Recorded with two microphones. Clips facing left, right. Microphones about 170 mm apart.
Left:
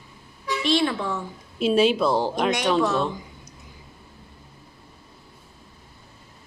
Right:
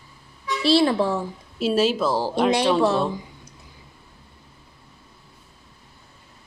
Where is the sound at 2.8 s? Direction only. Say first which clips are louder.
Right 2 dB; 30° right (ahead or behind).